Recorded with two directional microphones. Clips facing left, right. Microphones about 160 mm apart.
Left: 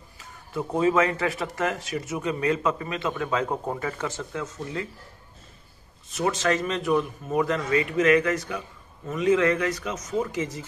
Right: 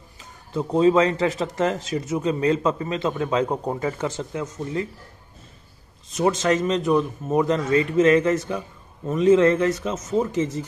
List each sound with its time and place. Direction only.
0.2 s speech: 20° right (ahead or behind)
6.1 s speech: 20° right (ahead or behind)